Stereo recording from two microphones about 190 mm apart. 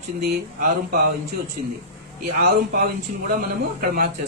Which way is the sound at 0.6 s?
45° right (ahead or behind).